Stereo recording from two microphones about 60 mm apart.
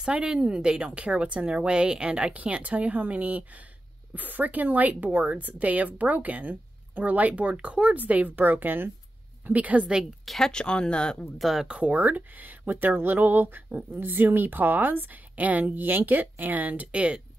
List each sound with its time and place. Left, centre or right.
0.1 s a woman's voice: centre
10.2 s speech: centre
10.5 s speech: centre
11.3 s speech: centre
11.6 s speech: right